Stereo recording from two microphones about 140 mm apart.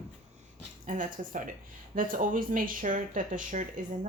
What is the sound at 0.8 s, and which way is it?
Speech, 65° right (ahead or behind).